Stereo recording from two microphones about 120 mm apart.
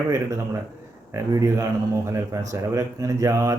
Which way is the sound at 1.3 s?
25° right (ahead or behind).